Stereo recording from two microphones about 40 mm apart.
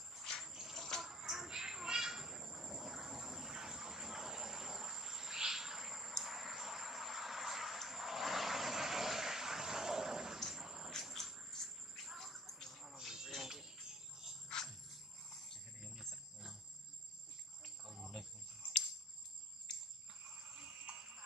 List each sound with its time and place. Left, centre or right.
0.4 s water: centre
0.7 s bathtub: centre
1.0 s bird: centre
6.2 s vehicle: centre
10.5 s a sound: centre
11.1 s a sound: centre
13.3 s a sound: centre
14.5 s wild animals: centre
15.8 s cricket: centre
17.8 s cricket: centre
20.5 s music: right